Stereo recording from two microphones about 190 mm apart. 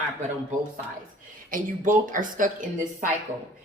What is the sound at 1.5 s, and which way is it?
A woman's voice, 45° right (ahead or behind).